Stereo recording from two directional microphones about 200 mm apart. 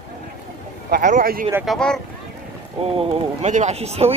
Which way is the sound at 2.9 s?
35° right (ahead or behind).